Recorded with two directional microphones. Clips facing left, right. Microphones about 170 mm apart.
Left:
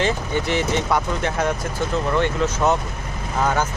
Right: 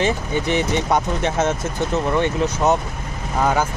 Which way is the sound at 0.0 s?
20° right (ahead or behind).